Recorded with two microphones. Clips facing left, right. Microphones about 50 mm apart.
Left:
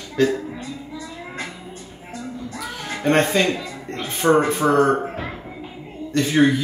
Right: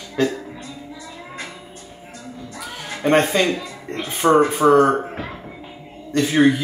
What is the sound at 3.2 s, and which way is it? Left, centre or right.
Speech, centre.